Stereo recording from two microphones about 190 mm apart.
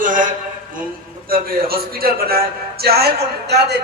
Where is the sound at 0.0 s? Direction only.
45° right (ahead or behind).